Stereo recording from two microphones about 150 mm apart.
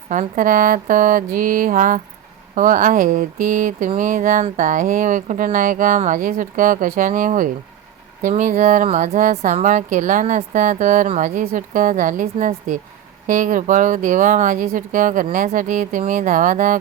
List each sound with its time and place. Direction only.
0.1 s speech: 60° right (ahead or behind)